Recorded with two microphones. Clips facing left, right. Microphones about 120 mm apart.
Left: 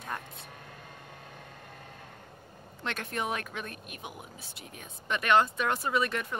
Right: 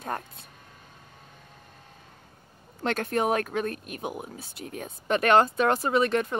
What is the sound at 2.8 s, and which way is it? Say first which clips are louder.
Speech: right 8 dB; 40° right (ahead or behind).